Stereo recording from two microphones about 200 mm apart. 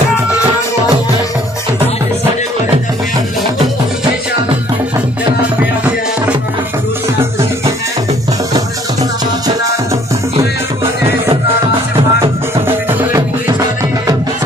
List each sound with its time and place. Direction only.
11.9 s music: 25° right (ahead or behind)
12.6 s music: 15° right (ahead or behind)